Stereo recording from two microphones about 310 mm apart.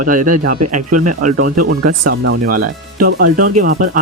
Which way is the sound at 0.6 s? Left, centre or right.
Right.